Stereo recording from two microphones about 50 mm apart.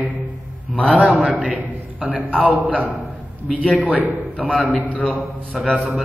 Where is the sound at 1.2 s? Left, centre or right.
Right.